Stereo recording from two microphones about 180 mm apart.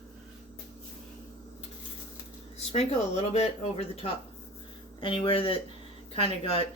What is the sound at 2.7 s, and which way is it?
A woman's voice, 35° left (ahead or behind).